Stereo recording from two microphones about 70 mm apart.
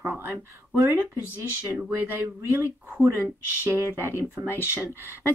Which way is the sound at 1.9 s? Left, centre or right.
Right.